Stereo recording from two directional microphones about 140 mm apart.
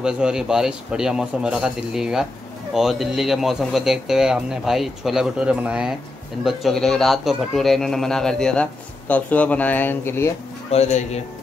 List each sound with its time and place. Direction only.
0.0 s speech: 5° right (ahead or behind); by 10.3 s 15° left (ahead or behind)
10.7 s speech: 55° left (ahead or behind)